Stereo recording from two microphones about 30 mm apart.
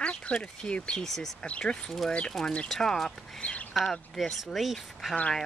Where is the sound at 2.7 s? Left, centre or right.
Centre.